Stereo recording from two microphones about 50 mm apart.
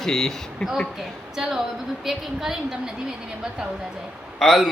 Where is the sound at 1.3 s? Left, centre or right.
Centre.